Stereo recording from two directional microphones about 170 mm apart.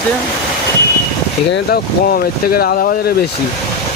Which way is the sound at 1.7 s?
65° left (ahead or behind).